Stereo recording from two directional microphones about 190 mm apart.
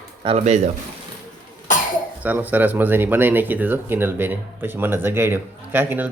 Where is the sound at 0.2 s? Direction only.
30° right (ahead or behind).